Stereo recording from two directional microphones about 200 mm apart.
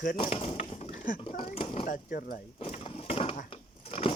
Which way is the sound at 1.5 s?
30° left (ahead or behind).